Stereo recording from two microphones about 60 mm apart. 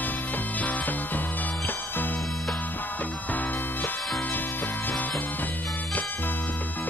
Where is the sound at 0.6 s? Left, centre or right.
Left.